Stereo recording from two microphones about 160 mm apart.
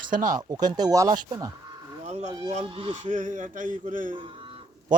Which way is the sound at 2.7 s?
30° right (ahead or behind).